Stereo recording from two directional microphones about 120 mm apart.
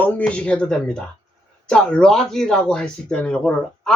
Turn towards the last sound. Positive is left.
turn(degrees=10)  # may be behind; listen again after turning